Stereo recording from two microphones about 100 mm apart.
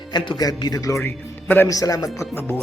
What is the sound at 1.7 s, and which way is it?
Speech, 35° left (ahead or behind).